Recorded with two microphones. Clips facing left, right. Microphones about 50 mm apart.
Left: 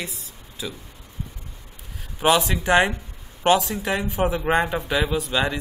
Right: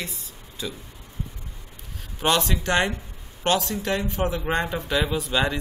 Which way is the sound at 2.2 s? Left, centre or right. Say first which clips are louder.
Left 3 dB; centre.